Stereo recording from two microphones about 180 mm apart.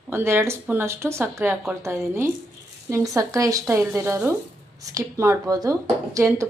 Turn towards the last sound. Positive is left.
turn(degrees=-15)  # may be behind; listen again after turning